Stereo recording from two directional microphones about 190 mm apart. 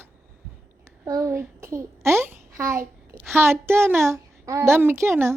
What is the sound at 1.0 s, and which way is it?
A child's voice, 15° right (ahead or behind).